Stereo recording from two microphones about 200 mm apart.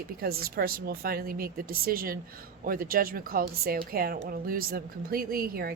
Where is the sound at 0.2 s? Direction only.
50° right (ahead or behind).